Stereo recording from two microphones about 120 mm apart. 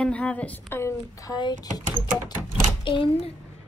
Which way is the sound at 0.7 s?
20° left (ahead or behind).